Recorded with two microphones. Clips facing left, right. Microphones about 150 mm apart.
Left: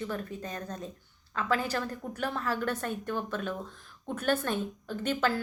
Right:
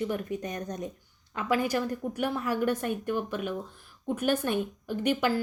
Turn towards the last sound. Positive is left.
turn(degrees=-15)  # may be behind; listen again after turning